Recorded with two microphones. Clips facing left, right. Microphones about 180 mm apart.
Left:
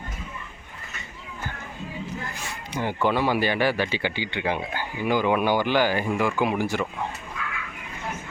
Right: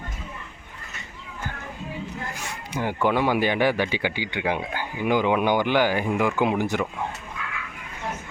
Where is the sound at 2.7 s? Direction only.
10° right (ahead or behind).